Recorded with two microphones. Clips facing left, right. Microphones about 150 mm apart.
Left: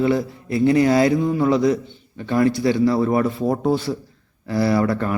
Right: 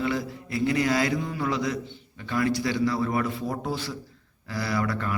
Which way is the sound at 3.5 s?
55° left (ahead or behind).